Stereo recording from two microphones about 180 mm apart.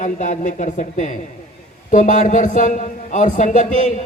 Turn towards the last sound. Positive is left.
turn(degrees=40)  # may be behind; listen again after turning